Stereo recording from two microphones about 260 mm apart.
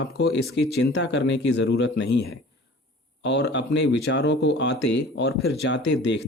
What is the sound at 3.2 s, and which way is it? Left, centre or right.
Speech, left.